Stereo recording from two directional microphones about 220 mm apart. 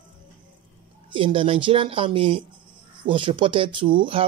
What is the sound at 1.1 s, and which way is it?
Speech, 25° right (ahead or behind).